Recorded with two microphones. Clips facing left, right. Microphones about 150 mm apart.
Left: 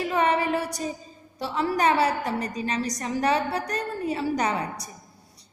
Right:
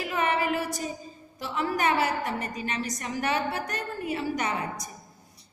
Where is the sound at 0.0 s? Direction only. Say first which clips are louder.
Left 4 dB; 35° left (ahead or behind).